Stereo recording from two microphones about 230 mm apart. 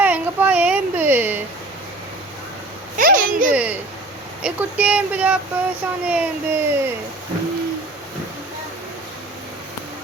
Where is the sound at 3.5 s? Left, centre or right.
Centre.